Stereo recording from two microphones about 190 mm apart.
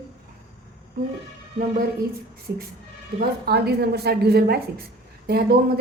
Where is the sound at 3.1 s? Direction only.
55° right (ahead or behind).